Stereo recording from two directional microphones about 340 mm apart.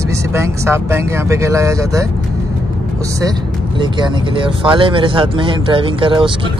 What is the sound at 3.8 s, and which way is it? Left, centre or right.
Speech, centre.